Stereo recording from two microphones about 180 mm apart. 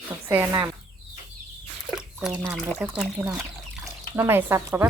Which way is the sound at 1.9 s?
5° right (ahead or behind).